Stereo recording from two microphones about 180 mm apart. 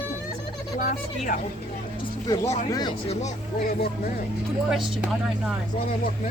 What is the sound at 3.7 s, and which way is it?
Speech, 55° left (ahead or behind).